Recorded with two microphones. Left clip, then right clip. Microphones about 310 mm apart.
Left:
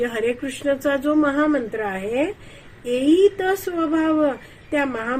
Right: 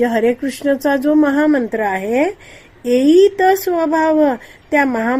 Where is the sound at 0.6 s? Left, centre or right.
Right.